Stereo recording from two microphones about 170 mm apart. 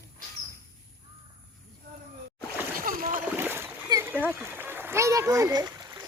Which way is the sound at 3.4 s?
15° right (ahead or behind).